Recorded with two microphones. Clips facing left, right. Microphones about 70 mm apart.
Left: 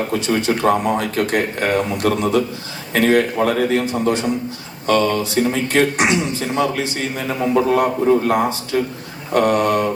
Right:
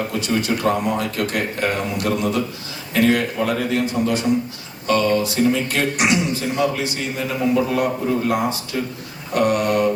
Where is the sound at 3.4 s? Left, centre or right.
Left.